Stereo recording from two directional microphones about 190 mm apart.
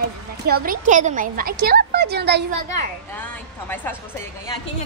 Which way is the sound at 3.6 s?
10° left (ahead or behind).